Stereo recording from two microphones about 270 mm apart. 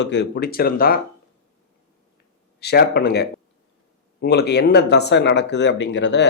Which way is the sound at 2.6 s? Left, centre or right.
Left.